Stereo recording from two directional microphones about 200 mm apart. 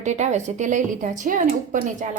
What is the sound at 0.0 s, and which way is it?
A woman's voice, 35° right (ahead or behind).